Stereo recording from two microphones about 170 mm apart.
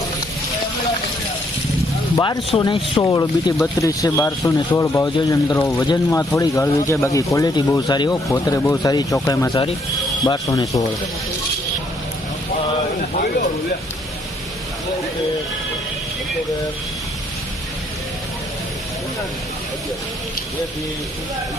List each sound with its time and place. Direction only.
2.1 s speech: 20° left (ahead or behind)